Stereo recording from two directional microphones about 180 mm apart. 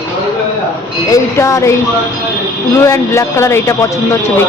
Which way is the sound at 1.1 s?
15° left (ahead or behind).